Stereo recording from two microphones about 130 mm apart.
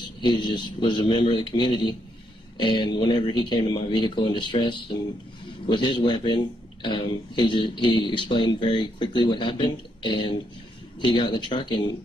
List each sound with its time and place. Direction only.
0.2 s speech: 35° left (ahead or behind)